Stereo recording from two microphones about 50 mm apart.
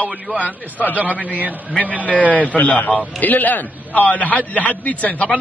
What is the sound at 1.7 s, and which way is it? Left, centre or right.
A man's voice, left.